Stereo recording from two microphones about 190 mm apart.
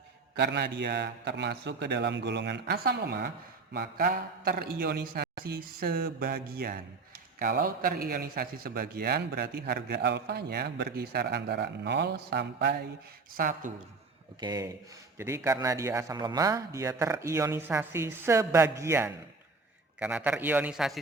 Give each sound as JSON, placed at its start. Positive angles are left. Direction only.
{"t": 0.3, "sound": "a man's voice", "side_deg": -65}
{"t": 13.3, "sound": "speech", "side_deg": -45}
{"t": 14.4, "sound": "speech", "side_deg": -20}